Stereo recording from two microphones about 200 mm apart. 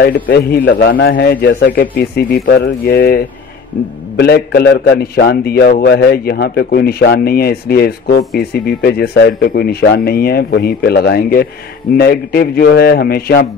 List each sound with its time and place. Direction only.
0.0 s a man's voice: 55° left (ahead or behind)